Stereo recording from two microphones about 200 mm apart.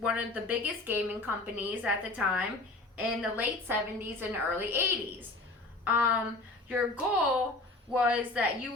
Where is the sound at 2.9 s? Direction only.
5° right (ahead or behind).